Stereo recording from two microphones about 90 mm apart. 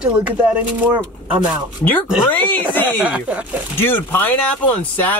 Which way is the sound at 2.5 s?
20° left (ahead or behind).